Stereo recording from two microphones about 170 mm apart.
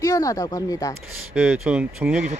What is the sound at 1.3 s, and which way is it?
Speech, 10° right (ahead or behind).